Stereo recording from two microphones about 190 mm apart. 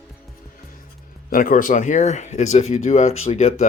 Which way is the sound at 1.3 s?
45° left (ahead or behind).